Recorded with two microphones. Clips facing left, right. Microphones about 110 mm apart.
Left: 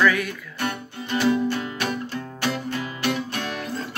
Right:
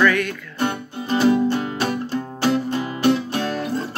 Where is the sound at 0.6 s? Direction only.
25° right (ahead or behind).